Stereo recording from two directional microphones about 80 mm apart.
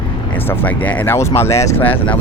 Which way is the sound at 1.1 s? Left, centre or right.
Left.